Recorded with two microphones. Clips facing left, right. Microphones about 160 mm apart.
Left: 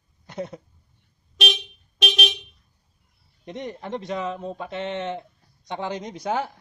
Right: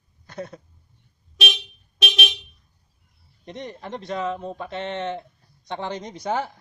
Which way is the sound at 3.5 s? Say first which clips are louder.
Left 2 dB; 15° left (ahead or behind).